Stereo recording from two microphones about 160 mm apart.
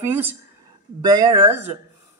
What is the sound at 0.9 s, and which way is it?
Speech, 25° right (ahead or behind).